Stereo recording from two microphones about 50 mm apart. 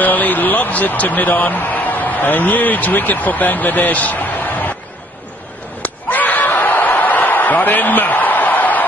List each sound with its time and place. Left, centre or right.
0.0 s speech: left
5.8 s slap: left